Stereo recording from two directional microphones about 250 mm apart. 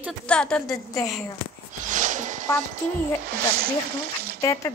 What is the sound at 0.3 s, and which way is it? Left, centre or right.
Speech, centre.